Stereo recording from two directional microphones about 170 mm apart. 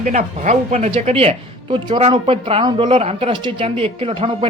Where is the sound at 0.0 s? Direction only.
45° right (ahead or behind).